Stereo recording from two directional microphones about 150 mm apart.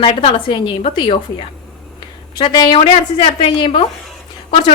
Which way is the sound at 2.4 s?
30° left (ahead or behind).